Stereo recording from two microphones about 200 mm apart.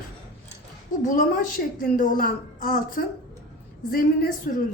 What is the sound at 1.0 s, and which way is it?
A woman's voice, 40° left (ahead or behind).